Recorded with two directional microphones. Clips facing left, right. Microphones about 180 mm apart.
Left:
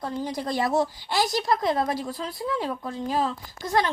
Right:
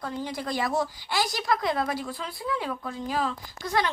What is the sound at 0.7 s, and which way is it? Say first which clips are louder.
Speech: left 3 dB; 25° left (ahead or behind).